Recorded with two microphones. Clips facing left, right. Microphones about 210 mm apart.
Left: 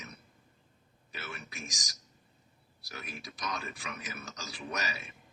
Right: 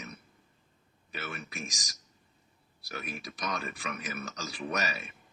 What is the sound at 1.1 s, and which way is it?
Speech, 60° right (ahead or behind).